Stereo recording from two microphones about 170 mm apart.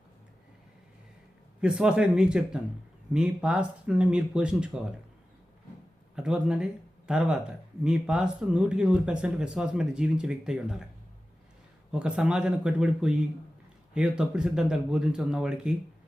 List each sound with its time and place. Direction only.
1.6 s speech: 5° right (ahead or behind)
6.1 s speech: 5° right (ahead or behind)
11.9 s speech: 5° right (ahead or behind)